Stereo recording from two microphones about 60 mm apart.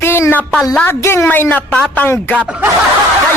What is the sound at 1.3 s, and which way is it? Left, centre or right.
Speech, left.